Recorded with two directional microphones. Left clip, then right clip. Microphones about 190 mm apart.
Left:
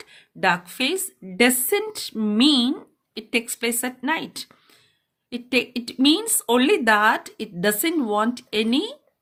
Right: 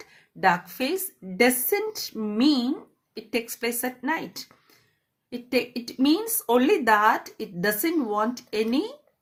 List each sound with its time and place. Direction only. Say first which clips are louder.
0.3 s speech: left 1 dB; 40° left (ahead or behind)